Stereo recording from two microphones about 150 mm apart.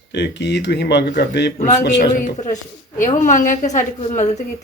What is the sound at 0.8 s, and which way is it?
Speech, 90° left.